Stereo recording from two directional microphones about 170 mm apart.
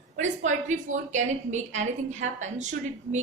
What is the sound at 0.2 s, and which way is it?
A woman's voice, 45° right (ahead or behind).